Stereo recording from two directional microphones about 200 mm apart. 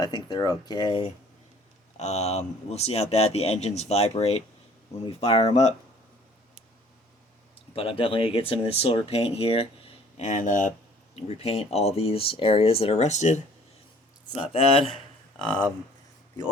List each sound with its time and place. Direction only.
0.0 s speech: 20° left (ahead or behind)
7.8 s speech: 25° left (ahead or behind)